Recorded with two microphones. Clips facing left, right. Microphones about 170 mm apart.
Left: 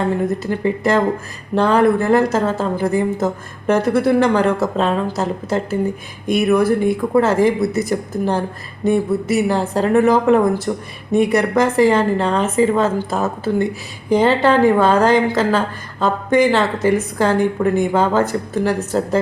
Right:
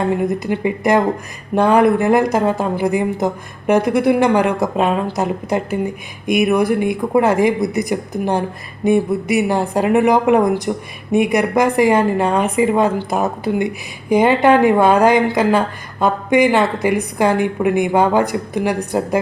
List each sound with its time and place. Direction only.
0.3 s a woman's voice: 15° right (ahead or behind)